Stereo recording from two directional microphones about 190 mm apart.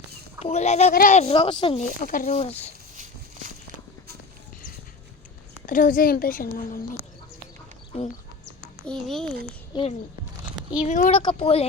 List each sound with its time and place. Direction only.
0.4 s speech: 35° left (ahead or behind)
1.8 s a child's voice: 45° left (ahead or behind)
2.3 s speech: 35° left (ahead or behind)
5.6 s a child's voice: 45° left (ahead or behind)
8.8 s a child's voice: 5° left (ahead or behind)
9.7 s speech: 20° left (ahead or behind)
10.8 s a child's voice: 45° left (ahead or behind)
11.1 s speech: 30° left (ahead or behind)